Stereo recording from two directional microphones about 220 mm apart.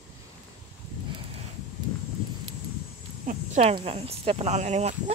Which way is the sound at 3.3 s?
30° right (ahead or behind).